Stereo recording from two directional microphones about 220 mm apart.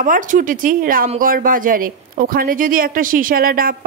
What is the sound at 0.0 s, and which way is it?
Speech, 35° right (ahead or behind).